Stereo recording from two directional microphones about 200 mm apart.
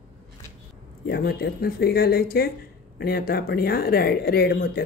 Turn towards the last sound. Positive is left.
turn(degrees=50)  # may be behind; listen again after turning